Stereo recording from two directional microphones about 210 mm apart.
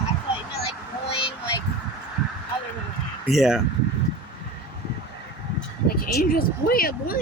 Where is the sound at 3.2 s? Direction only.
Centre (ahead or behind).